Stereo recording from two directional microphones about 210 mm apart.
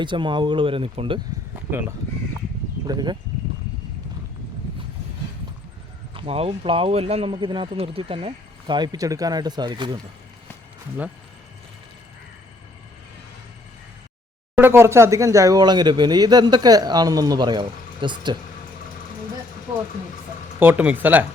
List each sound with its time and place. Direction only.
0.0 s speech: 20° right (ahead or behind)
2.8 s speech: 20° right (ahead or behind)
6.1 s speech: 30° right (ahead or behind)
14.5 s speech: 10° right (ahead or behind)
20.6 s speech: 10° right (ahead or behind)